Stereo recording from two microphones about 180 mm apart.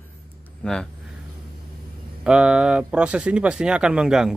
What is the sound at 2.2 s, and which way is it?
Speech, 5° right (ahead or behind).